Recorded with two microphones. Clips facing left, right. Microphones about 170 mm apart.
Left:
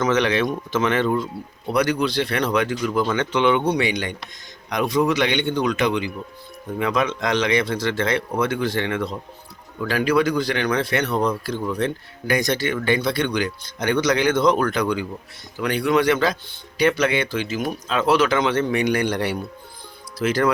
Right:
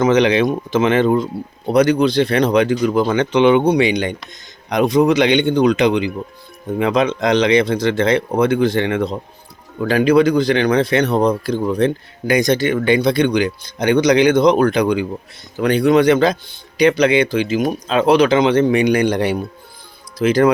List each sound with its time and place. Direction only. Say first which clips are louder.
0.0 s speech: right 6 dB; 15° right (ahead or behind)